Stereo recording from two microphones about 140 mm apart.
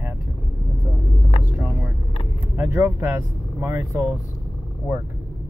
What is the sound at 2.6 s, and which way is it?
Speech, 20° right (ahead or behind).